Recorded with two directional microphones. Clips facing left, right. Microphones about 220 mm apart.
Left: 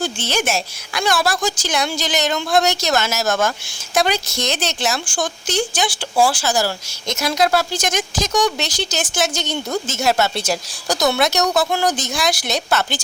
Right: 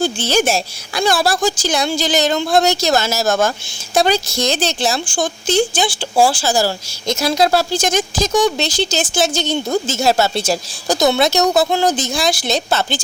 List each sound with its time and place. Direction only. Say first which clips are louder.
0.0 s speech: right 5 dB; 35° right (ahead or behind)